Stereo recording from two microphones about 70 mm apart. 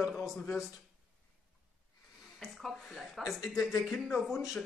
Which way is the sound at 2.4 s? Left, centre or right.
Centre.